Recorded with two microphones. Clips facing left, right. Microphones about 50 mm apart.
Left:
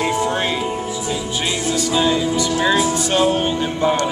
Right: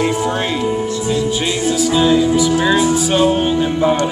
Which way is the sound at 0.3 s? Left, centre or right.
Centre.